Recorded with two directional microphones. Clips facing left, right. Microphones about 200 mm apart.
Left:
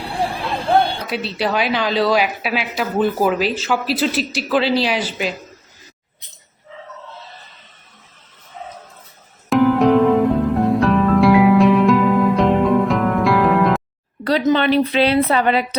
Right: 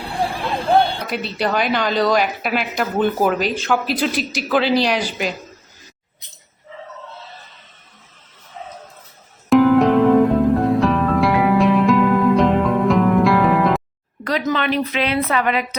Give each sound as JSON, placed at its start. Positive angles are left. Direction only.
{"t": 1.0, "sound": "a woman's voice", "side_deg": 0}
{"t": 9.5, "sound": "music", "side_deg": 0}
{"t": 14.3, "sound": "a woman's voice", "side_deg": 30}